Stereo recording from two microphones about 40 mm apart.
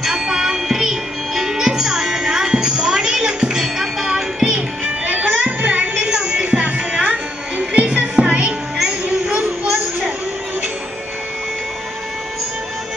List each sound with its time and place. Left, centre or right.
0.0 s music: centre
4.6 s music: right
5.9 s a sound: right